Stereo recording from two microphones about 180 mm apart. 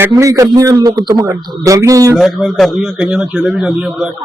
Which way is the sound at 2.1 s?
Centre (ahead or behind).